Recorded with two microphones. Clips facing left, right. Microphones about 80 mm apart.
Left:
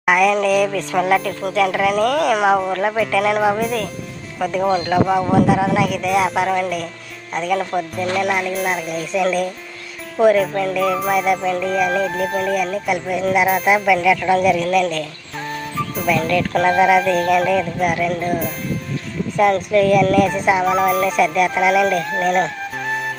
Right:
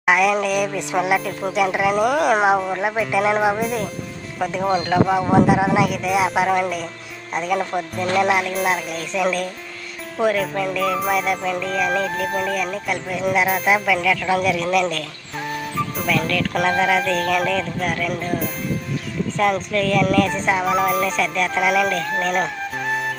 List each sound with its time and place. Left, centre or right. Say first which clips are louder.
0.0 s speech: left 2 dB; centre
1.5 s a woman's voice: left 1 dB; centre
4.4 s music: left 2 dB; centre
5.5 s music: left 1 dB; centre
19.4 s speech: left 6 dB; centre
20.1 s music: left 3 dB; centre